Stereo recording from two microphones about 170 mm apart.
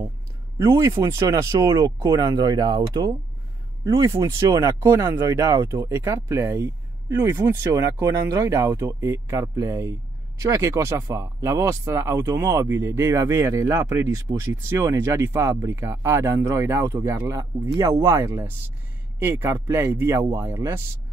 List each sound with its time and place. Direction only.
0.6 s speech: 20° right (ahead or behind)